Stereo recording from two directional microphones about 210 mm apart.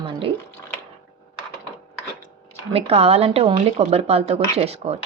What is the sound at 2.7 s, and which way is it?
A woman's voice, 30° right (ahead or behind).